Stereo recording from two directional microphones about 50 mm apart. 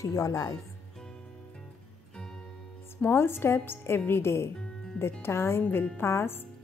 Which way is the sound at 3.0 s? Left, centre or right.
Left.